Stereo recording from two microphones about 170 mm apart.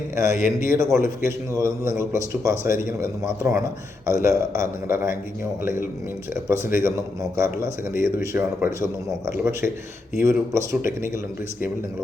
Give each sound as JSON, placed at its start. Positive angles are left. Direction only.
{"t": 0.2, "sound": "a man's voice", "side_deg": -15}
{"t": 6.3, "sound": "a man's voice", "side_deg": -15}